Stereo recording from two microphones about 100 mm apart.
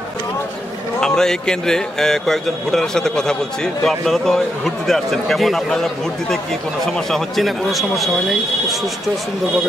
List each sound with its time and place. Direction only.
1.0 s a man's voice: 5° left (ahead or behind)